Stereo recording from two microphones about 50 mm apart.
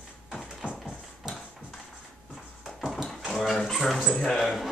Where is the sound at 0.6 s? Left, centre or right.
Right.